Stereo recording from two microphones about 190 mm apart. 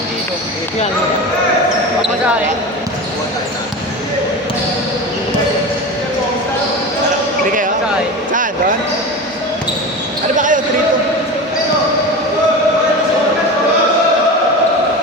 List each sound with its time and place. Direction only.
10.3 s basketball bounce: 40° right (ahead or behind)